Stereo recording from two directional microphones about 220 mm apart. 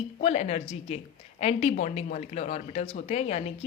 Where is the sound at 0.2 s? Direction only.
30° left (ahead or behind).